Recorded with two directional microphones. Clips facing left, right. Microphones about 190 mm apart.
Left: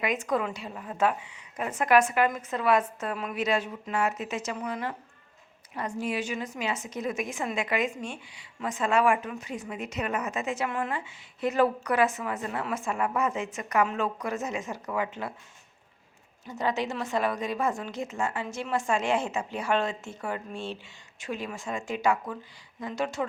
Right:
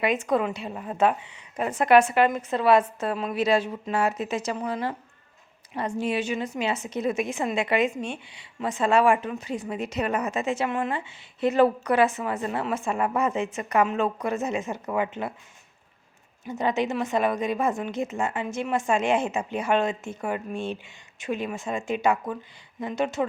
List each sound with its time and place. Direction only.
0.0 s a woman's voice: 30° right (ahead or behind)
16.5 s a woman's voice: 20° right (ahead or behind)